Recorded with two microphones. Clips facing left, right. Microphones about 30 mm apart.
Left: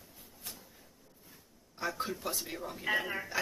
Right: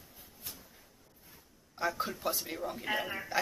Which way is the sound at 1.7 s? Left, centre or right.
Centre.